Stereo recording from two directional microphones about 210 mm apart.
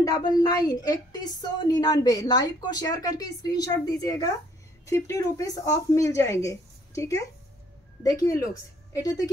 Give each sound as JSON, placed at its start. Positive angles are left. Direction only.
{"t": 0.0, "sound": "a woman's voice", "side_deg": 20}